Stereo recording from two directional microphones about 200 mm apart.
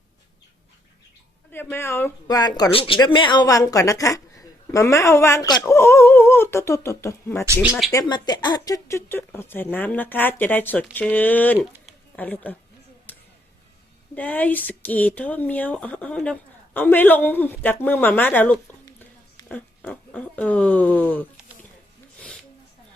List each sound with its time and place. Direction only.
1.7 s speech: 10° left (ahead or behind)
7.4 s speech: 10° right (ahead or behind)
7.9 s speech: 20° left (ahead or behind)
13.1 s a sound: 10° left (ahead or behind)
14.2 s speech: 10° left (ahead or behind)